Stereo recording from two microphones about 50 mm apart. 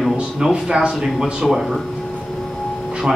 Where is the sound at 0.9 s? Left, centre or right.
Centre.